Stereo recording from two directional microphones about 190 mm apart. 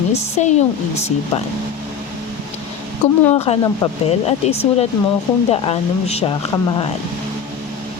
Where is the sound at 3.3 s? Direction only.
30° left (ahead or behind).